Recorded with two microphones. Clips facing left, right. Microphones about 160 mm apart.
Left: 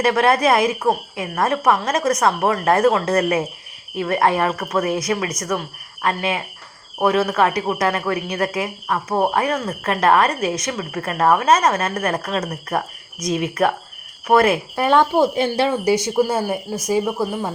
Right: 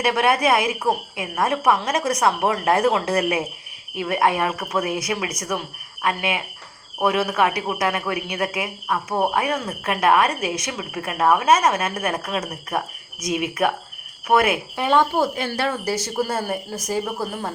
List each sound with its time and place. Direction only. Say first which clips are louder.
0.0 s speech: left 3 dB; 10° right (ahead or behind)
15.1 s speech: left 5 dB; 20° left (ahead or behind)